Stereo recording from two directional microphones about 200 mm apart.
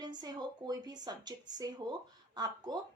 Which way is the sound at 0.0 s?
20° right (ahead or behind).